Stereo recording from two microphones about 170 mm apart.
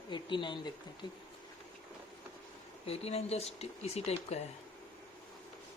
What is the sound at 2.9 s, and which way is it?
Speech, 35° left (ahead or behind).